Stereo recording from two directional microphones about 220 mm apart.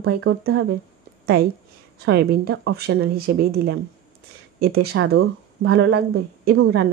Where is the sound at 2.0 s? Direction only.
50° right (ahead or behind).